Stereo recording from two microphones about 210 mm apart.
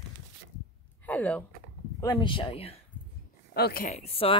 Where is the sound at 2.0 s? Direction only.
20° left (ahead or behind).